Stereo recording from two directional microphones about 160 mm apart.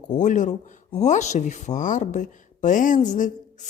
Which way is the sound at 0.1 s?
50° left (ahead or behind).